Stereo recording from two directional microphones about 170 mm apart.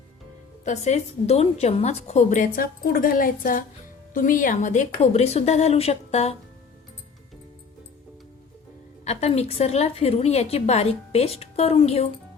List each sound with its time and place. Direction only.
0.6 s a woman's voice: 40° left (ahead or behind)
9.0 s a woman's voice: 40° left (ahead or behind)